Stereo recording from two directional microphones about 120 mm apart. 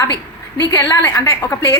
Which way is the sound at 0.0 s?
30° left (ahead or behind).